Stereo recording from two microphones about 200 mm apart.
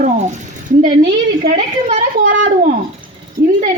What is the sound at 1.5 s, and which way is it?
Speech, 35° right (ahead or behind).